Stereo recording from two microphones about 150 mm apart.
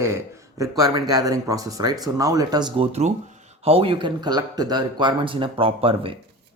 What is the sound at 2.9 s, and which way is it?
Speech, 45° right (ahead or behind).